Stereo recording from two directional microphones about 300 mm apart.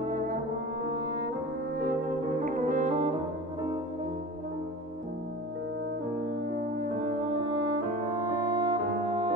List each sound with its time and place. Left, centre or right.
1.8 s brass instrument: right
6.5 s french horn: right